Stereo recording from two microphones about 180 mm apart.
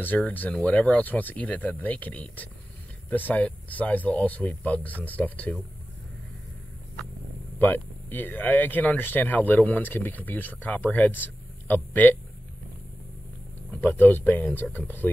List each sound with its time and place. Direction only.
0.0 s speech: 10° left (ahead or behind)
7.5 s speech: 10° left (ahead or behind)
13.7 s speech: 10° left (ahead or behind)